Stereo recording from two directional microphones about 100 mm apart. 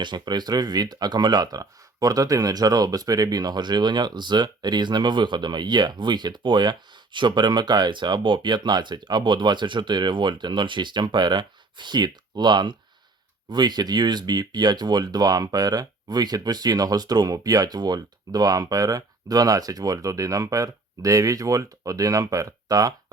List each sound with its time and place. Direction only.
0.0 s speech: 45° right (ahead or behind)